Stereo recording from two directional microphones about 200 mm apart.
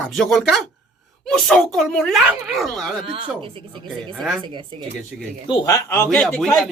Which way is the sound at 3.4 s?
25° right (ahead or behind).